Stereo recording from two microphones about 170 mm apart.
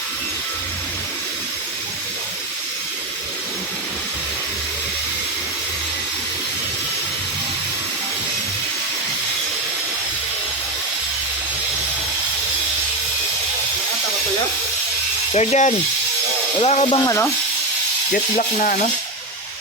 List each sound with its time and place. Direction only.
15.3 s ratchet: 40° left (ahead or behind)
16.6 s speech: 40° left (ahead or behind)
17.0 s speech: 20° left (ahead or behind)
18.1 s speech: 50° left (ahead or behind)